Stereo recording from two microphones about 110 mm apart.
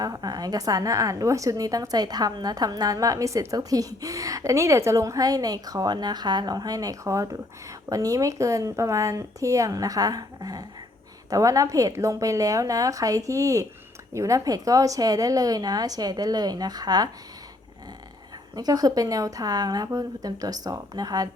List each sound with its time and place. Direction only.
0.0 s a woman's voice: 35° right (ahead or behind)
18.5 s a woman's voice: 35° right (ahead or behind)